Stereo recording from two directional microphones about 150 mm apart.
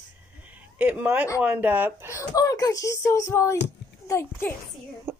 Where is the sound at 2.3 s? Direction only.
25° left (ahead or behind).